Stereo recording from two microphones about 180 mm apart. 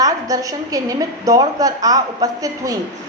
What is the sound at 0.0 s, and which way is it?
A woman's voice, 20° right (ahead or behind).